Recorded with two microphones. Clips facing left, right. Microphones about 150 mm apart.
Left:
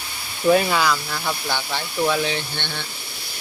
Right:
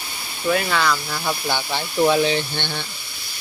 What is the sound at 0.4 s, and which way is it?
Speech, 25° left (ahead or behind).